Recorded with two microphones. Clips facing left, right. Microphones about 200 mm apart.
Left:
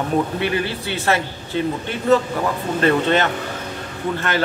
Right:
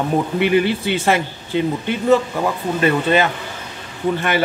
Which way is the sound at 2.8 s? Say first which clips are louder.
Right 1 dB; 10° right (ahead or behind).